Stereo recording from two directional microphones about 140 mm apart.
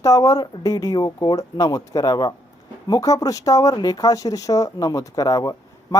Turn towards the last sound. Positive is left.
turn(degrees=25)  # may be behind; listen again after turning